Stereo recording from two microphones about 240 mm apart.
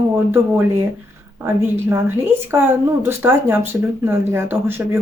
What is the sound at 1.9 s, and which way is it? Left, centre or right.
Speech, centre.